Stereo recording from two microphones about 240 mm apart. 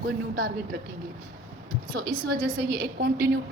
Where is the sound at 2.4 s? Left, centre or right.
Right.